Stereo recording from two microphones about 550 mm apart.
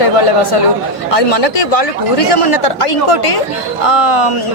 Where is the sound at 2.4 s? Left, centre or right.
Left.